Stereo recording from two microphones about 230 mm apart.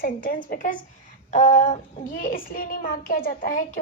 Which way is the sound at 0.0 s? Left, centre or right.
Left.